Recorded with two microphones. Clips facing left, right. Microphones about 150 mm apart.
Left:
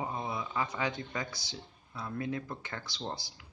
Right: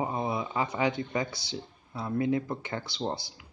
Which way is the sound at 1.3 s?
65° right (ahead or behind).